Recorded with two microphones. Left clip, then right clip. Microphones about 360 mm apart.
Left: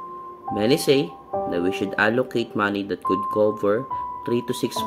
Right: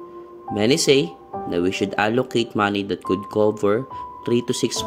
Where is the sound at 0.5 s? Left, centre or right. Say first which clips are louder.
Right 2 dB; centre.